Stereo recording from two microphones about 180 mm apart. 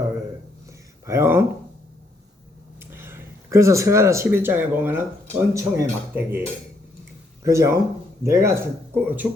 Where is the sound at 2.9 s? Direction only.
15° right (ahead or behind).